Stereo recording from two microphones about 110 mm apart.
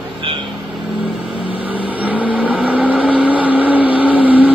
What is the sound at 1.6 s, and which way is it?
Vehicle, 15° right (ahead or behind).